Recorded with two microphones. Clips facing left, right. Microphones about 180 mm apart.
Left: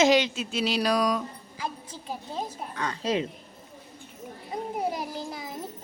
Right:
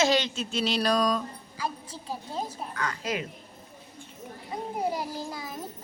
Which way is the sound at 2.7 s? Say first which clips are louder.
Left 5 dB; 25° left (ahead or behind).